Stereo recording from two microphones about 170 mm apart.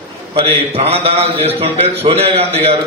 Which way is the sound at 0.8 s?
35° right (ahead or behind).